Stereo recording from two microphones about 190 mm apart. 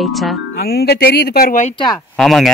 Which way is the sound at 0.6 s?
55° left (ahead or behind).